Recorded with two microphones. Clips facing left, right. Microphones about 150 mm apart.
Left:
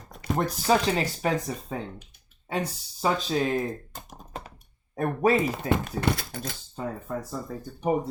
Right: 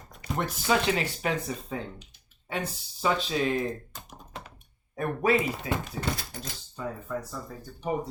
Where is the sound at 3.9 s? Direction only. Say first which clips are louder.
Left 4 dB; 45° left (ahead or behind).